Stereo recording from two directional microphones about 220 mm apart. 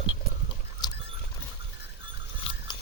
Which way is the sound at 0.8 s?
20° left (ahead or behind).